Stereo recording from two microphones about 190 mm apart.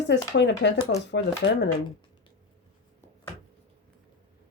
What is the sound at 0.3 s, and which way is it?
Speech, 65° left (ahead or behind).